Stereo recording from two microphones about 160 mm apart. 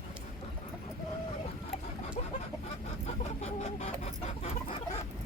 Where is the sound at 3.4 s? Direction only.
45° left (ahead or behind).